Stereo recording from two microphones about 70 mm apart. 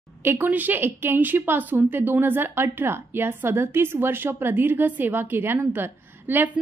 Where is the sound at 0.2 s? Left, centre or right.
Right.